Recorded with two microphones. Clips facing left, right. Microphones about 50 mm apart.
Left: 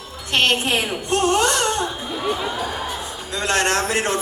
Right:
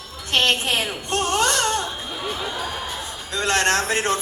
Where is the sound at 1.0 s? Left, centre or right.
Left.